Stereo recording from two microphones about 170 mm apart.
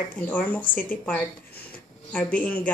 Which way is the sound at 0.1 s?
10° left (ahead or behind).